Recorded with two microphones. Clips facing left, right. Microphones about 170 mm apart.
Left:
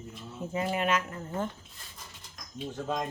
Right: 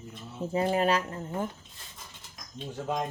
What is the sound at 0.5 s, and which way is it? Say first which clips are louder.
Speech: right 3 dB; 35° right (ahead or behind).